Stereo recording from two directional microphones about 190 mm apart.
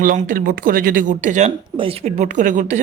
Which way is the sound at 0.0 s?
45° right (ahead or behind).